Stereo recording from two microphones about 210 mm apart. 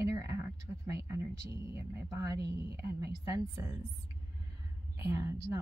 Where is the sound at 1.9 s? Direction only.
15° right (ahead or behind).